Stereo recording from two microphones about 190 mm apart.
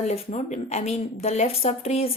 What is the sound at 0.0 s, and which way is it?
Speech, 35° left (ahead or behind).